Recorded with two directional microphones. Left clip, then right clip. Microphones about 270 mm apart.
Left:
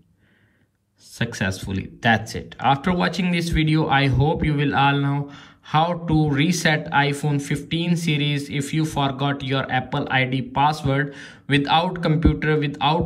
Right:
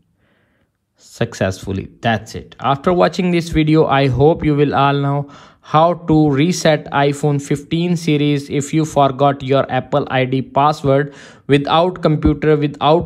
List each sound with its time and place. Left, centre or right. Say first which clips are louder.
1.1 s speech: right 7 dB; right